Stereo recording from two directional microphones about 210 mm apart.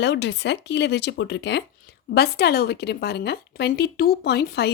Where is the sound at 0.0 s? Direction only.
55° left (ahead or behind).